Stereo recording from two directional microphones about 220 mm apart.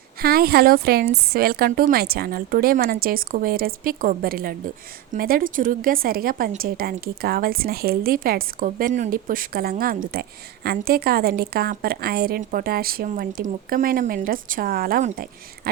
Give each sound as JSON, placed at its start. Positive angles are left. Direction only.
{"t": 0.2, "sound": "a woman's voice", "side_deg": -45}